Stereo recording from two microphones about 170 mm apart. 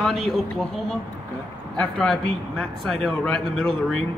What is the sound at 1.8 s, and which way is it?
A man's voice, 5° left (ahead or behind).